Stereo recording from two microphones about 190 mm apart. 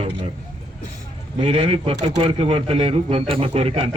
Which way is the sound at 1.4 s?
30° right (ahead or behind).